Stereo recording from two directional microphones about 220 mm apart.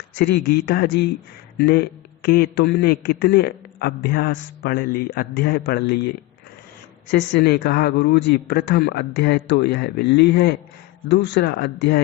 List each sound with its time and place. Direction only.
0.1 s a man's voice: 50° left (ahead or behind)
7.1 s a man's voice: 50° left (ahead or behind)